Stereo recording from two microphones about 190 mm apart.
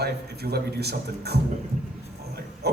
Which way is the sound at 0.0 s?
55° right (ahead or behind).